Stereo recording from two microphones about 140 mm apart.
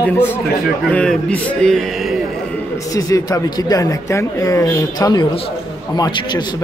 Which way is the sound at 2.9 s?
25° left (ahead or behind).